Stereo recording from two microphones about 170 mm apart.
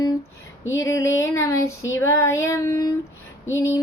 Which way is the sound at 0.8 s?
20° left (ahead or behind).